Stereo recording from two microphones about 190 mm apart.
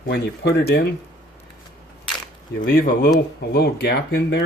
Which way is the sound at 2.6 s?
60° left (ahead or behind).